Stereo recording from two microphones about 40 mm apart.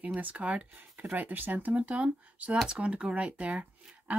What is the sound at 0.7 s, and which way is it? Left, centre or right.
Speech, right.